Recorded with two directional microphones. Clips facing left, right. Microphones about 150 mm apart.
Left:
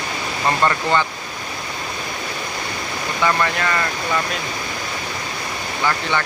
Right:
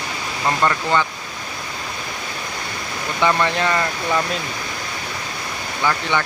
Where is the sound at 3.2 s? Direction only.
20° right (ahead or behind).